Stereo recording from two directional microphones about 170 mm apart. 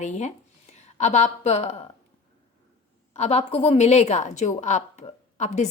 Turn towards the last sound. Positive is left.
turn(degrees=40)  # may be behind; listen again after turning